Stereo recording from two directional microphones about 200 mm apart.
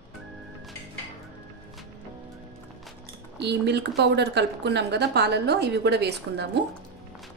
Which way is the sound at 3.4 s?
60° right (ahead or behind).